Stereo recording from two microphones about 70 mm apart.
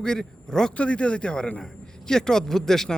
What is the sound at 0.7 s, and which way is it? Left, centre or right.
A man's voice, centre.